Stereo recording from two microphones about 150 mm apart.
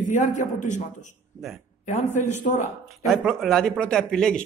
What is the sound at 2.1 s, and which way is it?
Speech, 55° left (ahead or behind).